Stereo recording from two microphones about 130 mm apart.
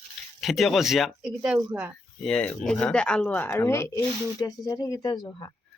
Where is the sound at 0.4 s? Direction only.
Centre (ahead or behind).